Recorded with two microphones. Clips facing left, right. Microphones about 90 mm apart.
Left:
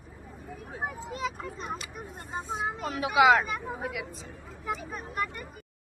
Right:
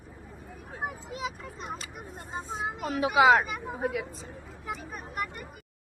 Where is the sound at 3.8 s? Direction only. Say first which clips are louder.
Right 4 dB; 30° right (ahead or behind).